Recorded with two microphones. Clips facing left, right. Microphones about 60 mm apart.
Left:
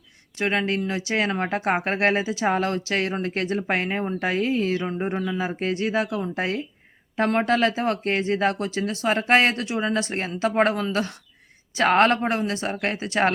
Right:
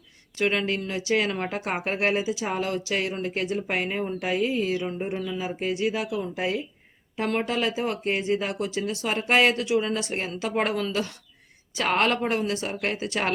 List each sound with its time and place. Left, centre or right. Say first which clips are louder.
0.3 s speech: left 1 dB; left